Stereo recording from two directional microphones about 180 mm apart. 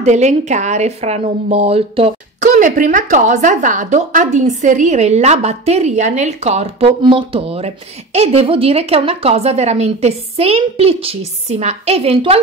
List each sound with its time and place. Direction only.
0.0 s speech: 40° right (ahead or behind)